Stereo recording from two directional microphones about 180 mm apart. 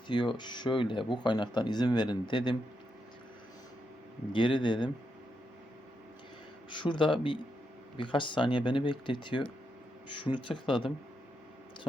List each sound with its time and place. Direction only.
0.1 s speech: 25° left (ahead or behind)
4.3 s speech: 25° left (ahead or behind)
6.7 s speech: 25° left (ahead or behind)